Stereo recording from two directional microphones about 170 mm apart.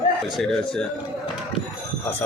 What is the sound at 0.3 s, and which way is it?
Speech, centre (ahead or behind).